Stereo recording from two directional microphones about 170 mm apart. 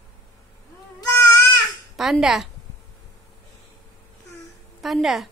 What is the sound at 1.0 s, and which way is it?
Crying, 15° left (ahead or behind).